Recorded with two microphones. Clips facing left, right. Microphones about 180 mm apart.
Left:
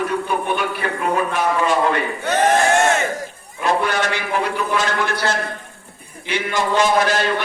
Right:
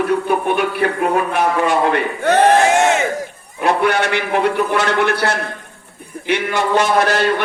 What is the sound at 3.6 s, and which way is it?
A man's voice, 60° right (ahead or behind).